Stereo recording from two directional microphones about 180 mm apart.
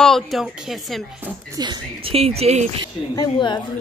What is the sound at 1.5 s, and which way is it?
Speech, 25° right (ahead or behind).